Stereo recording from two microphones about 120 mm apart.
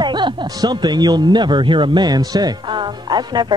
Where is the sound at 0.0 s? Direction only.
40° right (ahead or behind).